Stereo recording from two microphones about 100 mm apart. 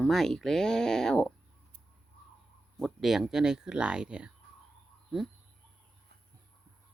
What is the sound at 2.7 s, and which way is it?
Speech, centre (ahead or behind).